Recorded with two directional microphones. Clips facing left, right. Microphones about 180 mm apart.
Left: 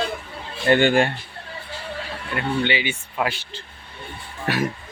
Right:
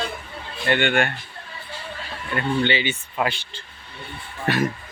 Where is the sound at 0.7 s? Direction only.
35° left (ahead or behind).